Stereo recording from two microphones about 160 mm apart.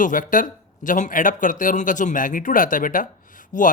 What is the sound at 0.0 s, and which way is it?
Speech, 55° left (ahead or behind).